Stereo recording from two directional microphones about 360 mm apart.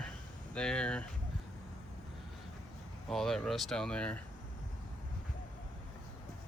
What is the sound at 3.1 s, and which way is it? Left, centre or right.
Speech, centre.